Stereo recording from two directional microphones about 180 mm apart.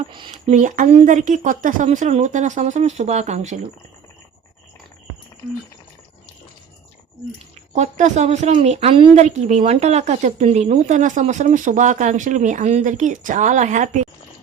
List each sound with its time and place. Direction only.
0.0 s speech: 25° right (ahead or behind)
0.5 s speech: 45° right (ahead or behind)
7.7 s speech: 40° right (ahead or behind)